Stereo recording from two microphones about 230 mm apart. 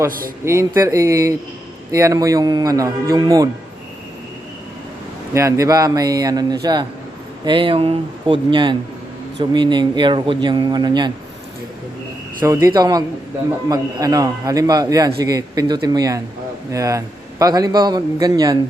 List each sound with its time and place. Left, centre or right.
0.4 s a man's voice: centre
5.3 s a man's voice: centre
12.6 s a man's voice: centre